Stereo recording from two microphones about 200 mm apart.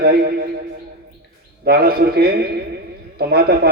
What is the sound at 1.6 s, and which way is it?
A man's voice, 50° right (ahead or behind).